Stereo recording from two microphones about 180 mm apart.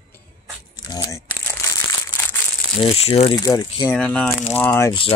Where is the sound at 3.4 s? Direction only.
20° left (ahead or behind).